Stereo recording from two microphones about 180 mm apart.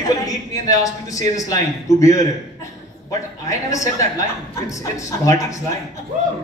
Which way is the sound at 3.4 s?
20° left (ahead or behind).